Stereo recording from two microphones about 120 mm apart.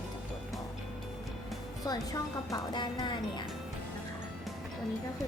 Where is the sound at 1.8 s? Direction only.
30° left (ahead or behind).